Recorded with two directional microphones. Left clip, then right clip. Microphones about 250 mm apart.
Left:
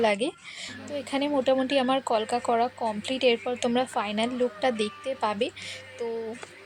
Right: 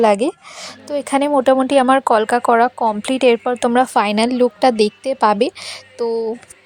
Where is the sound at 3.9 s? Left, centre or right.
Right.